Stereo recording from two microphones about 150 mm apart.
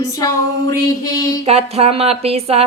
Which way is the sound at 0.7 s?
20° left (ahead or behind).